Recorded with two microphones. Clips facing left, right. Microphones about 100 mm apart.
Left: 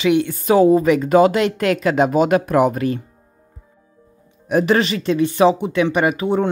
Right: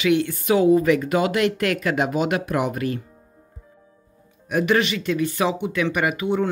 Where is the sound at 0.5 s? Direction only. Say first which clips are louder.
Left 4 dB; 35° left (ahead or behind).